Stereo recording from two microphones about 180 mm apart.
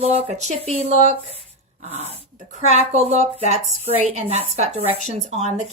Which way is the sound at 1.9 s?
35° right (ahead or behind).